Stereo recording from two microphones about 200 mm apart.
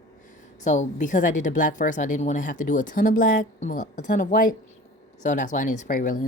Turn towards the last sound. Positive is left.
turn(degrees=40)  # may be behind; listen again after turning